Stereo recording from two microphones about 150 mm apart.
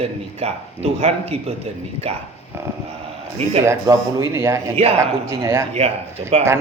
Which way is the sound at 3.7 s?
20° right (ahead or behind).